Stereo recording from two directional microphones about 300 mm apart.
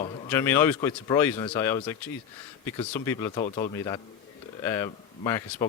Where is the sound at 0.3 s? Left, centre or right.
Centre.